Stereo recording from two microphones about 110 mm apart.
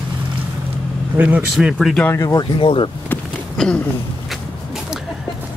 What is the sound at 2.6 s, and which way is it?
Speech, 50° left (ahead or behind).